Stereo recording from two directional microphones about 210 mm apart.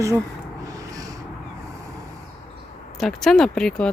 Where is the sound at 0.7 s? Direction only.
15° right (ahead or behind).